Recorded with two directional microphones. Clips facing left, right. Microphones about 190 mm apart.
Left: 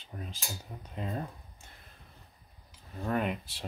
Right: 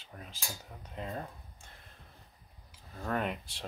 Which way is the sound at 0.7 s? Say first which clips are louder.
Left 4 dB; 10° left (ahead or behind).